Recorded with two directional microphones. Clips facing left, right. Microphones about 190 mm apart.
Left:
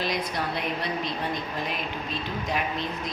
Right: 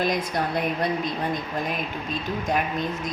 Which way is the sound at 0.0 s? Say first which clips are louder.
Right 4 dB; 50° right (ahead or behind).